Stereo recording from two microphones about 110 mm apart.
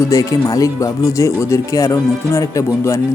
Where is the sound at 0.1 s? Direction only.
30° left (ahead or behind).